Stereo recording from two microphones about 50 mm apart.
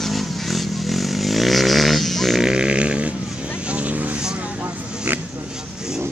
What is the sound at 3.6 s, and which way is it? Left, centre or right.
Vehicle, right.